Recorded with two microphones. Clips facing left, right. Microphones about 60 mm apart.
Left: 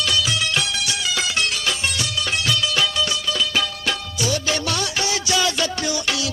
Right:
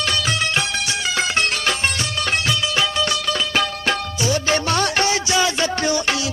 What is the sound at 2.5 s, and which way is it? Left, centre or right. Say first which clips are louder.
Music: right 1 dB; right.